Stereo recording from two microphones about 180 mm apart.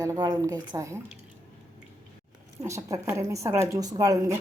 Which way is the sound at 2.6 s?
15° right (ahead or behind).